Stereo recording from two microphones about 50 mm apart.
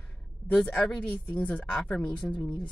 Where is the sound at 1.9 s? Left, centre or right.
Centre.